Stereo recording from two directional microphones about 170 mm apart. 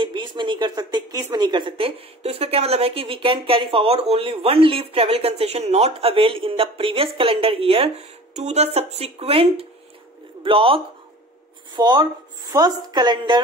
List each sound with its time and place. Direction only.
0.0 s a woman's voice: 30° right (ahead or behind)